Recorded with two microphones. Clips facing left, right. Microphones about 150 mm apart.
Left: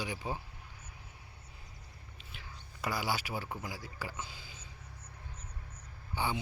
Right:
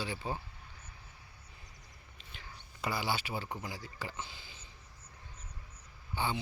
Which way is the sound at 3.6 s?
10° left (ahead or behind).